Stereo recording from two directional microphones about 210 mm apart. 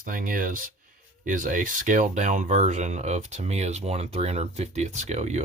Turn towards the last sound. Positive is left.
turn(degrees=-35)  # may be behind; listen again after turning